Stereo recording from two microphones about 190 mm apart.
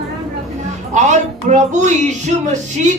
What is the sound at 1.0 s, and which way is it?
Speech, 40° right (ahead or behind).